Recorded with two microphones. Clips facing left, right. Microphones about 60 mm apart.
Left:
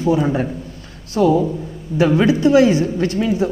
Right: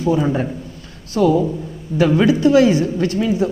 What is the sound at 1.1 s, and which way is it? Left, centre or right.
Speech, left.